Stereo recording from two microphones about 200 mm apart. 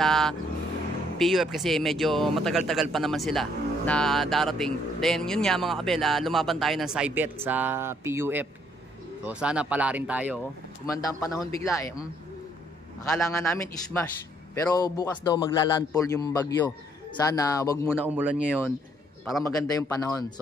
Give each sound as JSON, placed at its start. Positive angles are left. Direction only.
{"t": 0.0, "sound": "speech", "side_deg": 0}
{"t": 10.9, "sound": "a man's voice", "side_deg": 15}
{"t": 13.3, "sound": "a man's voice", "side_deg": 15}
{"t": 17.9, "sound": "speech", "side_deg": -10}
{"t": 19.4, "sound": "a man's voice", "side_deg": 15}